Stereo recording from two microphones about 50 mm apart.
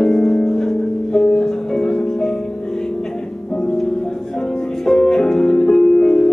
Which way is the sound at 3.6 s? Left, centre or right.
Centre.